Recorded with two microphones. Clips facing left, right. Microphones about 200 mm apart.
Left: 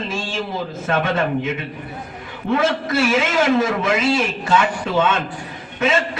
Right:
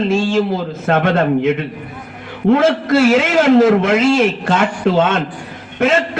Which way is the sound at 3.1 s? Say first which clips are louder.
Right 5 dB; 60° right (ahead or behind).